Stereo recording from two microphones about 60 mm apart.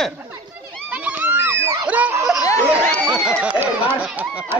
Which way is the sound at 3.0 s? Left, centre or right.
Centre.